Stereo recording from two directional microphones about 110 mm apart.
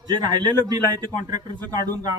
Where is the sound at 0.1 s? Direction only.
40° right (ahead or behind).